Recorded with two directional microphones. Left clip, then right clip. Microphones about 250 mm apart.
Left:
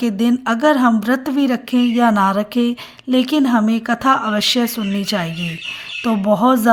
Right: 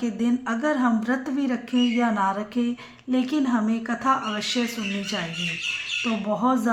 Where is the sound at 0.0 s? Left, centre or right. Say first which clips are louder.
Left 8 dB; left.